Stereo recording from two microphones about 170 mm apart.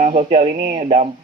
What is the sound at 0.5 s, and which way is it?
Speech, 60° right (ahead or behind).